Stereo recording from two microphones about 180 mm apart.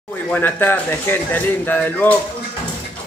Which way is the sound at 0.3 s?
10° left (ahead or behind).